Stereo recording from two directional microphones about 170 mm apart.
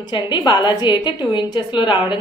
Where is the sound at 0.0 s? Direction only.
25° left (ahead or behind).